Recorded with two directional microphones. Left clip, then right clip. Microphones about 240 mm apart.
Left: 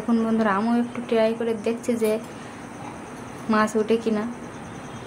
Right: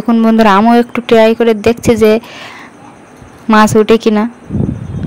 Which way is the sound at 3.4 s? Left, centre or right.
Right.